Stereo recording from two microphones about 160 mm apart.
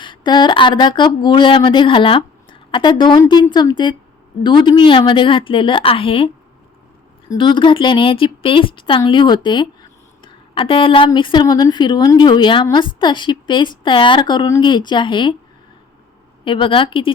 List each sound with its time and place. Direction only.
0.0 s a woman's voice: 30° left (ahead or behind)
16.4 s speech: 30° left (ahead or behind)